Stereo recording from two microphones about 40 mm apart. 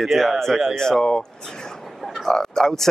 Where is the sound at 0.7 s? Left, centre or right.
Centre.